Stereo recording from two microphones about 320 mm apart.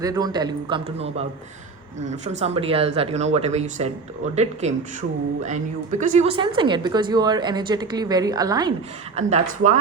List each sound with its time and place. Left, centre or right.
0.0 s a woman's voice: centre
2.4 s a woman's voice: centre